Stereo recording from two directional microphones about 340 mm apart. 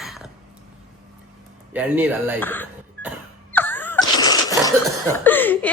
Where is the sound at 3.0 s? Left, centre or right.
Right.